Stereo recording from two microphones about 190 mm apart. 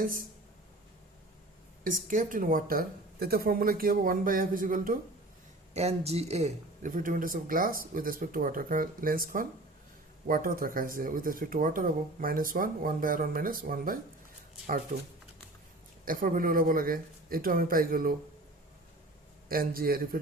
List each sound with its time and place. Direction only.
1.8 s speech: 45° right (ahead or behind)
5.7 s speech: 35° right (ahead or behind)
16.0 s speech: 45° right (ahead or behind)
19.5 s speech: 50° right (ahead or behind)